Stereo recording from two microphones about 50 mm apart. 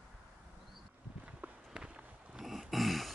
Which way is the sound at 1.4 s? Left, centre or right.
Centre.